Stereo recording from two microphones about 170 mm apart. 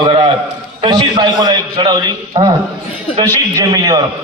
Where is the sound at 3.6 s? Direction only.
20° right (ahead or behind).